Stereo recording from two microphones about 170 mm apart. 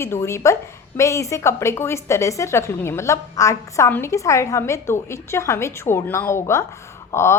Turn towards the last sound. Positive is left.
turn(degrees=15)  # may be behind; listen again after turning